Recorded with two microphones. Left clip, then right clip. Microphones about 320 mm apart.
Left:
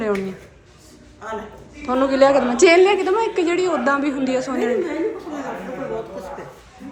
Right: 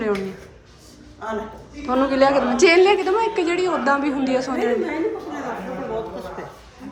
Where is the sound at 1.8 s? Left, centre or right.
Centre.